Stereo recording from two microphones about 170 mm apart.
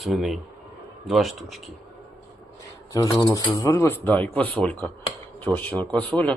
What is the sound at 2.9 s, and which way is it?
Speech, 20° left (ahead or behind).